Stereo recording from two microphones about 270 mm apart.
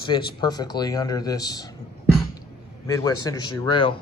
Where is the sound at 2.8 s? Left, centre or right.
Centre.